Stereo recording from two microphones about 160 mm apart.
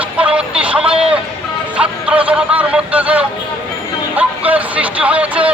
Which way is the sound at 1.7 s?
5° right (ahead or behind).